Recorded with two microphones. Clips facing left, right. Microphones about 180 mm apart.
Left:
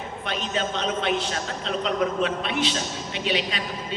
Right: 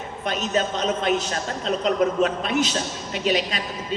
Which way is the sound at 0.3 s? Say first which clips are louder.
Right 4 dB; 40° right (ahead or behind).